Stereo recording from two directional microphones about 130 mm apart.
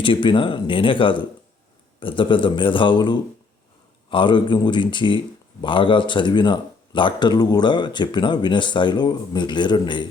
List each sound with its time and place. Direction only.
0.0 s speech: 40° left (ahead or behind)